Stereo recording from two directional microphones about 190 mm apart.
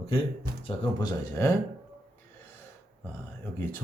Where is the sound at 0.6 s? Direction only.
25° left (ahead or behind).